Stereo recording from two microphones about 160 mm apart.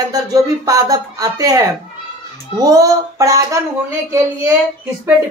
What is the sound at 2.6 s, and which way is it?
Speech, 20° right (ahead or behind).